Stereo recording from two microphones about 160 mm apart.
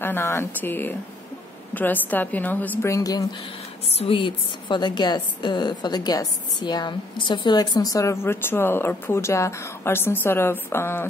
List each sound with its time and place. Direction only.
0.0 s a woman's voice: 15° left (ahead or behind)
3.8 s a woman's voice: 40° left (ahead or behind); by 11.1 s 15° left (ahead or behind)